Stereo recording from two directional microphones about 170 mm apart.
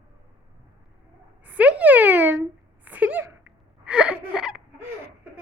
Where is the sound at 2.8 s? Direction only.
10° right (ahead or behind).